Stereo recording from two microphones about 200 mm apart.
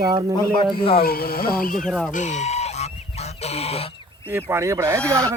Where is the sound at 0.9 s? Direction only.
50° left (ahead or behind).